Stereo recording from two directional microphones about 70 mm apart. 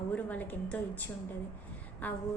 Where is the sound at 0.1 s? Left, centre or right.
Left.